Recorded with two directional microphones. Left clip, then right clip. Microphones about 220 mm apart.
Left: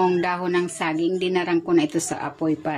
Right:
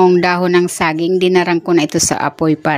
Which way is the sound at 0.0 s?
40° right (ahead or behind).